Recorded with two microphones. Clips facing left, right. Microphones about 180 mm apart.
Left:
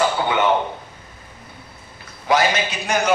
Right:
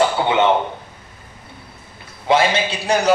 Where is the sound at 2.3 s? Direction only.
30° right (ahead or behind).